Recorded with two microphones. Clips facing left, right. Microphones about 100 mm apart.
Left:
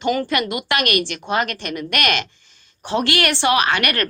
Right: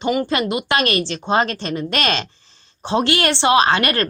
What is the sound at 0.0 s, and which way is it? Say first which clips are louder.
Speech: right 1 dB; 15° right (ahead or behind).